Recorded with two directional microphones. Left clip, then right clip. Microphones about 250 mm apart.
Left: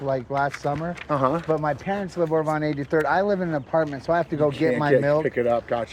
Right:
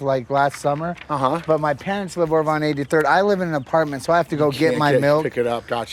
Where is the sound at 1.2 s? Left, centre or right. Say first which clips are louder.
Right 3 dB; centre.